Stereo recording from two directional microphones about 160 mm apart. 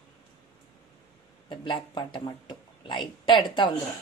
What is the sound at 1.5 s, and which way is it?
A woman's voice, 30° left (ahead or behind).